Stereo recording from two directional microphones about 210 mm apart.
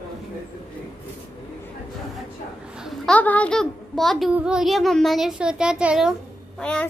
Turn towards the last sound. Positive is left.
turn(degrees=5)  # may be behind; listen again after turning